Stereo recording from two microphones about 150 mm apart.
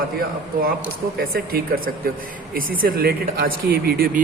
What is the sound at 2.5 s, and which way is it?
Speech, 80° right.